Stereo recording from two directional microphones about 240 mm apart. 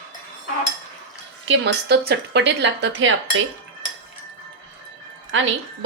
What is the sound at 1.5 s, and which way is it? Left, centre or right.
Speech, right.